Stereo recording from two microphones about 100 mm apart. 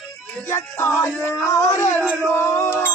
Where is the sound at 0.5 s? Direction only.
20° left (ahead or behind).